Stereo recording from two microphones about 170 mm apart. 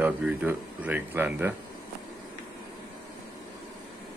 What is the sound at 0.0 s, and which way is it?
Speech, 5° right (ahead or behind).